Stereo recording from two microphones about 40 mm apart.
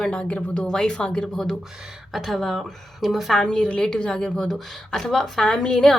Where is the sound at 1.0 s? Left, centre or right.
Left.